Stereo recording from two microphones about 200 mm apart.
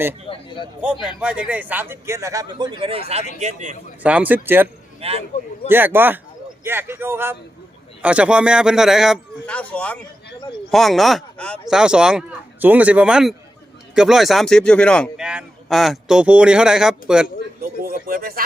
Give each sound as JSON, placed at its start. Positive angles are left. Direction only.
{"t": 0.3, "sound": "a man's voice", "side_deg": 25}
{"t": 1.2, "sound": "a man's voice", "side_deg": -5}
{"t": 4.0, "sound": "a man's voice", "side_deg": -5}
{"t": 4.9, "sound": "speech", "side_deg": -30}
{"t": 5.6, "sound": "a man's voice", "side_deg": -10}
{"t": 17.8, "sound": "speech", "side_deg": -45}